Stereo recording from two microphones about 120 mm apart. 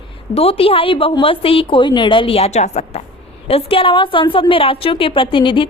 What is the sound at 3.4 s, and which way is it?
A woman's voice, 50° left (ahead or behind).